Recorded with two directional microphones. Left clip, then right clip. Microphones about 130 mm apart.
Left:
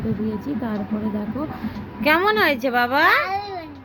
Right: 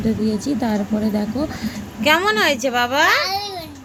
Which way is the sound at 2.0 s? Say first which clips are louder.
Right 1 dB; centre (ahead or behind).